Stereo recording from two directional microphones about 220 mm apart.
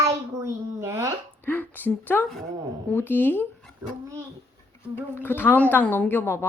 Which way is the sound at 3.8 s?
15° right (ahead or behind).